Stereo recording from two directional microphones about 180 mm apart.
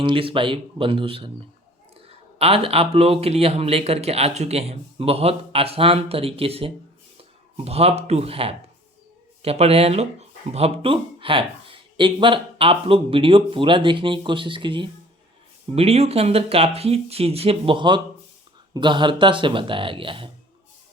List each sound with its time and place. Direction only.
0.0 s speech: 30° right (ahead or behind)